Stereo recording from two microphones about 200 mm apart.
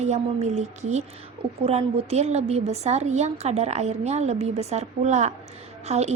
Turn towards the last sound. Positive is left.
turn(degrees=-35)  # may be behind; listen again after turning